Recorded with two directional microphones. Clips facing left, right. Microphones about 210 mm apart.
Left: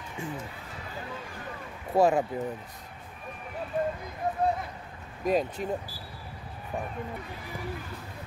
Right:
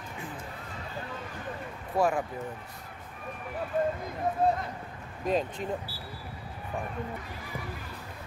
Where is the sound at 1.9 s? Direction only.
25° left (ahead or behind).